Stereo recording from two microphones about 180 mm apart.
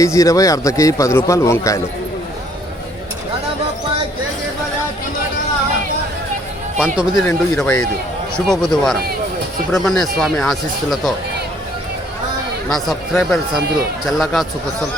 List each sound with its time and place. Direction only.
0.0 s a man's voice: 15° left (ahead or behind)
6.7 s speech: 5° right (ahead or behind)
7.3 s a man's voice: 5° left (ahead or behind)
12.7 s speech: centre (ahead or behind)